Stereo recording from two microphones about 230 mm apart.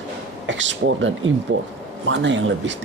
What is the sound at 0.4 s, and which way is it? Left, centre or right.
Speech, right.